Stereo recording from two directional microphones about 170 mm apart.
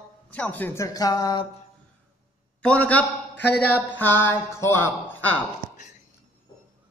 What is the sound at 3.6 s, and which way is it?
Speech, 10° left (ahead or behind).